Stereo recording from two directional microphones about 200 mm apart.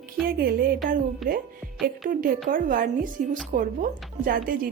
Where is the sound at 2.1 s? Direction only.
45° right (ahead or behind).